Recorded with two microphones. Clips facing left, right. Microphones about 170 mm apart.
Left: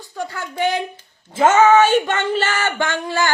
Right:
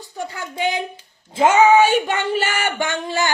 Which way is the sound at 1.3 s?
15° right (ahead or behind).